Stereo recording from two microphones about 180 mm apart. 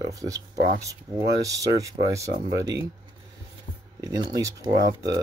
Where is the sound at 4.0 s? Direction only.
20° right (ahead or behind).